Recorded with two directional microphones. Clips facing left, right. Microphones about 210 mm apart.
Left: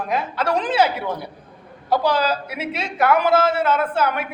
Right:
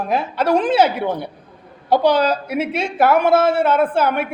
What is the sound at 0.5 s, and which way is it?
Speech, 55° right (ahead or behind).